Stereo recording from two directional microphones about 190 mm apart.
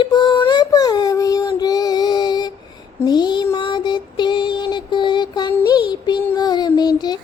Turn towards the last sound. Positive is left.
turn(degrees=20)  # may be behind; listen again after turning